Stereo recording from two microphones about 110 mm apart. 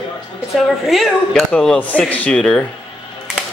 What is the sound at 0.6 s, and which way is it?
Speech, centre (ahead or behind).